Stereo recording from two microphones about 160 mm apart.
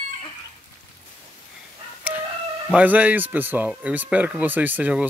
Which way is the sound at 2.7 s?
10° right (ahead or behind).